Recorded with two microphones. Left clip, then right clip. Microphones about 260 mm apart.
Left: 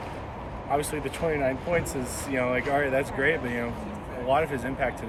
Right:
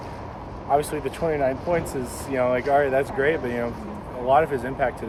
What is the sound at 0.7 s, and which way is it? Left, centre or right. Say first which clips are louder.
Speech: right 5 dB; centre.